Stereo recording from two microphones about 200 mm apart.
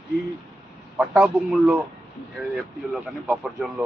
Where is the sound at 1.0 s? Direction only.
5° right (ahead or behind).